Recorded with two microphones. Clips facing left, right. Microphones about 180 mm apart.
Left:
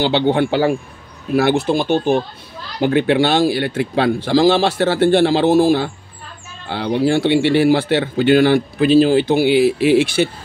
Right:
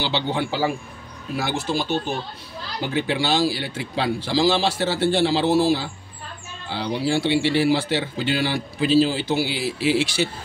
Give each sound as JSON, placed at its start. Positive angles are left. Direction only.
{"t": 0.0, "sound": "speech", "side_deg": 60}